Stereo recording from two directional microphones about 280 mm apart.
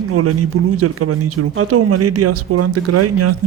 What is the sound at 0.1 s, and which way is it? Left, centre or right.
Speech, right.